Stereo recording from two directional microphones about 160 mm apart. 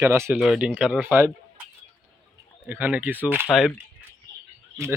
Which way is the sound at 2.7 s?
10° right (ahead or behind).